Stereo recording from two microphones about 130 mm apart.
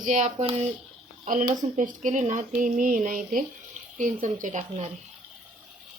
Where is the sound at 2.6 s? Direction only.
90° right.